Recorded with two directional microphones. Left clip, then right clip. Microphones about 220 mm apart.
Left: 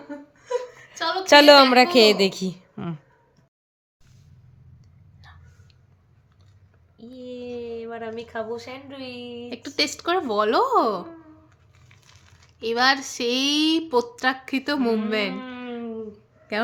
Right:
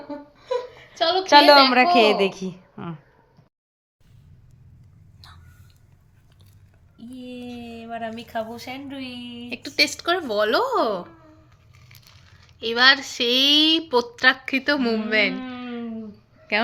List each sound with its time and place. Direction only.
1.3 s a woman's voice: 40° left (ahead or behind)
6.9 s a woman's voice: 15° left (ahead or behind)